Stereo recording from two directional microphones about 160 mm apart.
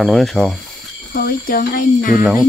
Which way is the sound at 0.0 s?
Centre (ahead or behind).